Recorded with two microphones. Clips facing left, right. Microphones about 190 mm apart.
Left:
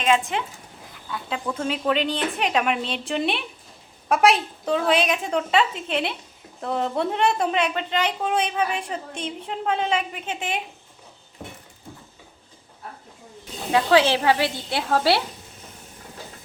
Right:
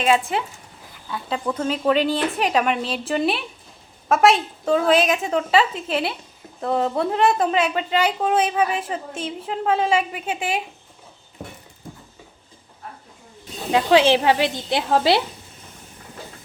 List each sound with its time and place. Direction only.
0.0 s a woman's voice: 5° right (ahead or behind)
13.7 s speech: 20° right (ahead or behind)